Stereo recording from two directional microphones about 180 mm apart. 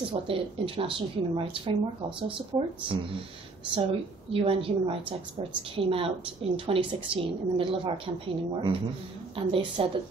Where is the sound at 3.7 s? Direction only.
30° right (ahead or behind).